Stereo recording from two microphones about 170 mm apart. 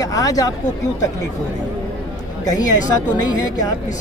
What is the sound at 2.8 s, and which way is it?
Speech, 20° left (ahead or behind).